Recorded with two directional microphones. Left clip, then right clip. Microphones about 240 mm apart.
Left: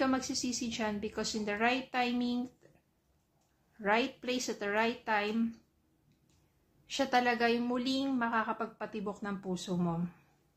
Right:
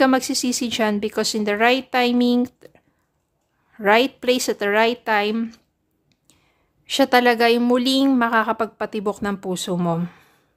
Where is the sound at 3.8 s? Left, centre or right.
Right.